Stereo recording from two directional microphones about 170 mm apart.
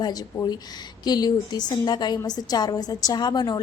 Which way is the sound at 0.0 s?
25° left (ahead or behind).